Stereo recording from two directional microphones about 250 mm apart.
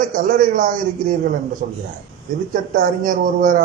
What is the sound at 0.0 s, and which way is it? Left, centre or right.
Speech, right.